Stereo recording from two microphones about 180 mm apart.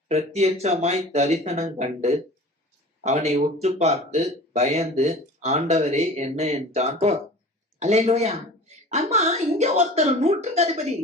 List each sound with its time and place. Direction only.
0.1 s speech: 35° right (ahead or behind)